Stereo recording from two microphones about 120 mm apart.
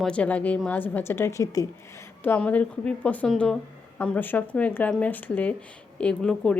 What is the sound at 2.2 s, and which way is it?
Speech, 15° left (ahead or behind).